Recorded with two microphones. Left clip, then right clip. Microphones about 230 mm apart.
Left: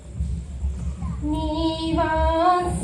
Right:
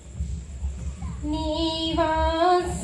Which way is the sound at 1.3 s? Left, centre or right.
Right.